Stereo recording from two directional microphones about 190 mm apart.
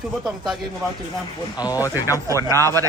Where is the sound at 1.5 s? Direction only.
20° left (ahead or behind).